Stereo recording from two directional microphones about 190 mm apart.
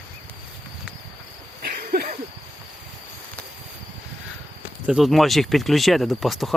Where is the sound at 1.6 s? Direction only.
55° right (ahead or behind).